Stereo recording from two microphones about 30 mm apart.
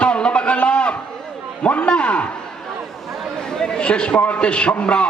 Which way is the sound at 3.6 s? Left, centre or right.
Left.